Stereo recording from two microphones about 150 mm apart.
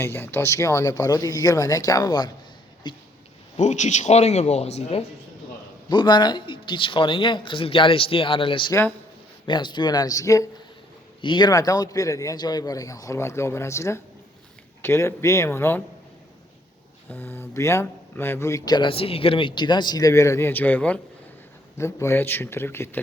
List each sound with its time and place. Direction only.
0.0 s speech: 15° left (ahead or behind)
3.6 s speech: 50° left (ahead or behind)
5.9 s speech: 30° left (ahead or behind)
17.1 s speech: 15° left (ahead or behind)